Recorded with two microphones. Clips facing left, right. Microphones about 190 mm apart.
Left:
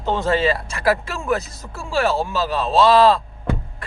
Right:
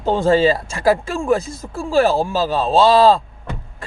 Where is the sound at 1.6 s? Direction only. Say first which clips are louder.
Right 5 dB; 40° right (ahead or behind).